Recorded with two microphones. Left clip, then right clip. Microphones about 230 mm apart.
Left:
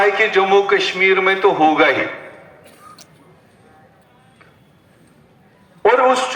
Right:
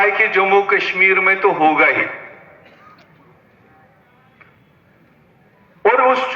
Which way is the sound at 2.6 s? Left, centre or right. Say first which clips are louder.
Left 3 dB; left.